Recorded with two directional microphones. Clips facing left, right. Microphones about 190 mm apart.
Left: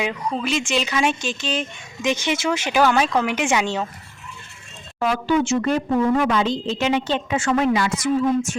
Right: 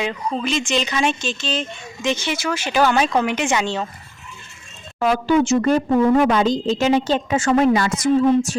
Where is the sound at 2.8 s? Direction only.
5° left (ahead or behind).